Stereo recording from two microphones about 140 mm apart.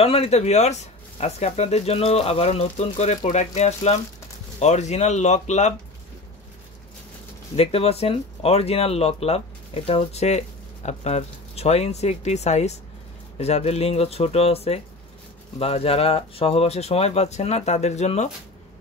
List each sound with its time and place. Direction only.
0.0 s speech: 45° left (ahead or behind)
7.5 s speech: 45° left (ahead or behind)